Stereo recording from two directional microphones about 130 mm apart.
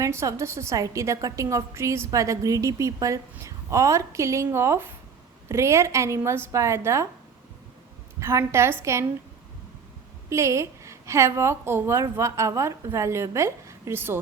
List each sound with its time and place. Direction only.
0.0 s a woman's voice: 20° right (ahead or behind)
8.2 s a woman's voice: 20° right (ahead or behind)
10.2 s a woman's voice: 20° right (ahead or behind)